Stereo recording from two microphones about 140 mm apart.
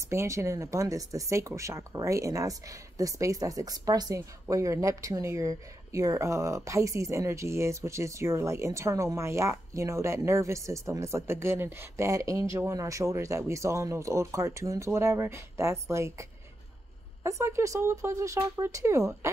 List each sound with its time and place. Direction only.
0.1 s speech: 20° right (ahead or behind)